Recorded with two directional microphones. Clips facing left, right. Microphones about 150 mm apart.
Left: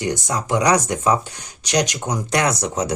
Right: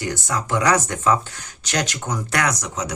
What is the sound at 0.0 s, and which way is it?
Speech, 20° left (ahead or behind).